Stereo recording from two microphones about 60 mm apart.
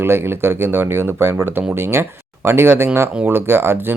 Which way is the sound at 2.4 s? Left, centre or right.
Right.